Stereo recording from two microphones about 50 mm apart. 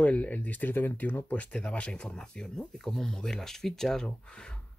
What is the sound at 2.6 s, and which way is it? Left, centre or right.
Speech, centre.